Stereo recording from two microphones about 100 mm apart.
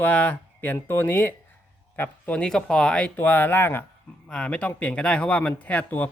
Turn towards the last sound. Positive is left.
turn(degrees=15)  # may be behind; listen again after turning